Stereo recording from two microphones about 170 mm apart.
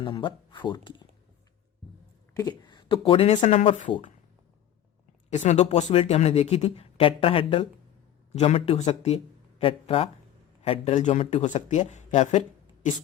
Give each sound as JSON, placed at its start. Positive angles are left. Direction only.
{"t": 0.0, "sound": "speech", "side_deg": 30}
{"t": 2.3, "sound": "speech", "side_deg": 25}
{"t": 5.3, "sound": "speech", "side_deg": 40}